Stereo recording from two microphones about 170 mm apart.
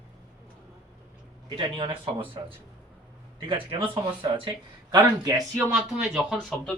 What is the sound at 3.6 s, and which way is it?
Speech, 30° right (ahead or behind).